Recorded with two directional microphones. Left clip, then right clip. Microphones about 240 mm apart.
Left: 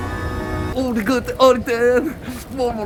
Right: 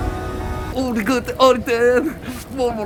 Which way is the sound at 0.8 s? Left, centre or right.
Centre.